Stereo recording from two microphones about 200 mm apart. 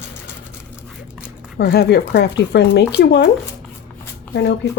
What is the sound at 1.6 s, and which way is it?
Speech, 55° left (ahead or behind).